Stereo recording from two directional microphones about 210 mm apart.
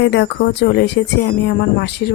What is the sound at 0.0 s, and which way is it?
Speech, 55° left (ahead or behind).